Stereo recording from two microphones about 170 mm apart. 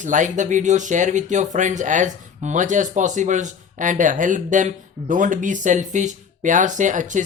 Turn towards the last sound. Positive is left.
turn(degrees=-50)  # may be behind; listen again after turning